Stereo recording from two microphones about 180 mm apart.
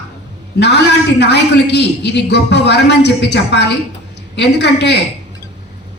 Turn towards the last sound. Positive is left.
turn(degrees=70)  # may be behind; listen again after turning